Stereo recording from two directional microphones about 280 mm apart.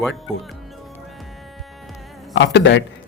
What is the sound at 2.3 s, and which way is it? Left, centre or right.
Speech, left.